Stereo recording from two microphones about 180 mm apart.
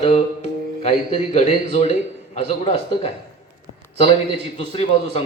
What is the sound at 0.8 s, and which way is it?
A man's voice, 35° left (ahead or behind).